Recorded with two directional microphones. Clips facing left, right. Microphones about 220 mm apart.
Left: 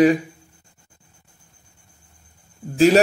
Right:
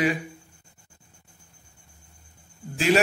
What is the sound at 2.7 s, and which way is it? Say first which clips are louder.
Speech: left 8 dB; 40° left (ahead or behind).